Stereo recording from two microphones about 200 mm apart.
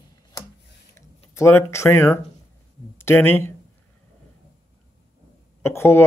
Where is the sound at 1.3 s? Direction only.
15° left (ahead or behind).